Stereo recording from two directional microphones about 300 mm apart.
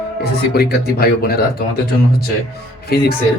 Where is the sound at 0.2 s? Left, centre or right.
Left.